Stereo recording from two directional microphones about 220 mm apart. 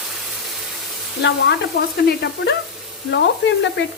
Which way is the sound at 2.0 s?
50° left (ahead or behind).